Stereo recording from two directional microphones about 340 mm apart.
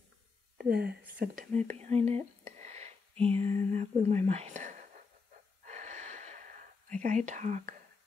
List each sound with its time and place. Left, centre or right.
0.6 s speech: right
5.7 s gasp: right